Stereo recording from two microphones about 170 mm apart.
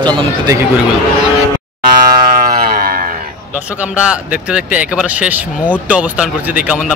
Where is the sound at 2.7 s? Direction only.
60° right (ahead or behind).